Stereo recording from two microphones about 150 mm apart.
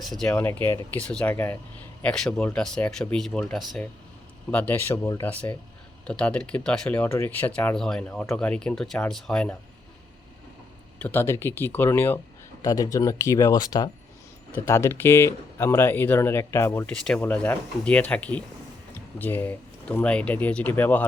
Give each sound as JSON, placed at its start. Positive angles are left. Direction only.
{"t": 0.2, "sound": "speech", "side_deg": 10}
{"t": 4.5, "sound": "speech", "side_deg": 10}
{"t": 11.0, "sound": "speech", "side_deg": 15}